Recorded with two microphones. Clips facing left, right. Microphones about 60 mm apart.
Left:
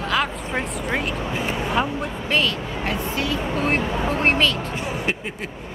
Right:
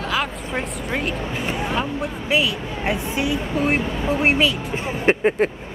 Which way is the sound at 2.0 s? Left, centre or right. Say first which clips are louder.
Right 1 dB; centre.